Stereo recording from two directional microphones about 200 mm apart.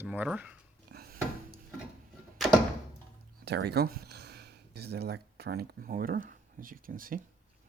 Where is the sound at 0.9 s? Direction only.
50° right (ahead or behind).